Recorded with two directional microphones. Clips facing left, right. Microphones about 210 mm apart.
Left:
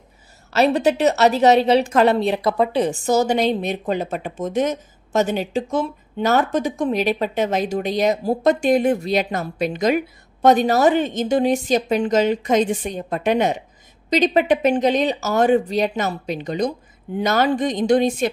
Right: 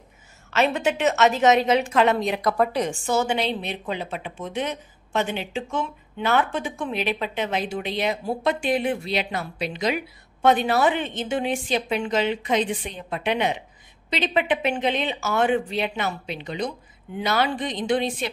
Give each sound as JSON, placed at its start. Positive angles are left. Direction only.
{"t": 0.5, "sound": "a woman's voice", "side_deg": 35}